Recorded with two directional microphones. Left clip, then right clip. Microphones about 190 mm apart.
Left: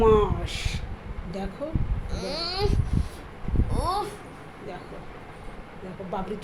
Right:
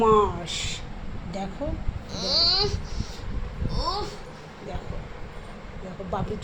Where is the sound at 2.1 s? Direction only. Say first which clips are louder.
Right 8 dB; 45° left (ahead or behind).